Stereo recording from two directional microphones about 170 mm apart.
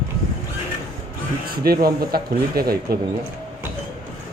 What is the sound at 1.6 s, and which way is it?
Speech, 65° right (ahead or behind).